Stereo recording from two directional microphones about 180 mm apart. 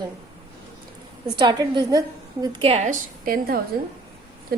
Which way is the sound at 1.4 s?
25° right (ahead or behind).